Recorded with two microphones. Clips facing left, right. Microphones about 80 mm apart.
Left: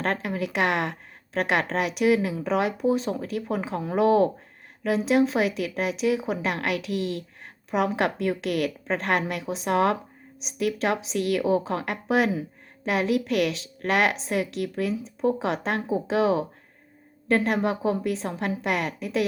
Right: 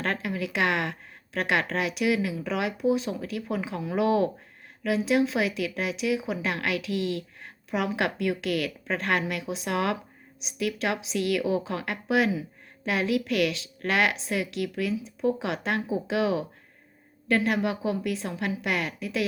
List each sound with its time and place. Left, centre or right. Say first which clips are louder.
0.0 s speech: left 2 dB; left